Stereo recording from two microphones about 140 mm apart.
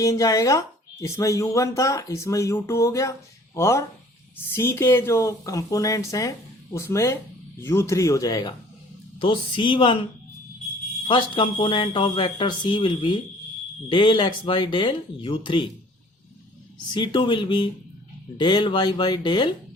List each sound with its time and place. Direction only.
0.0 s speech: 25° left (ahead or behind)
11.1 s speech: 35° left (ahead or behind)
16.9 s speech: 35° left (ahead or behind)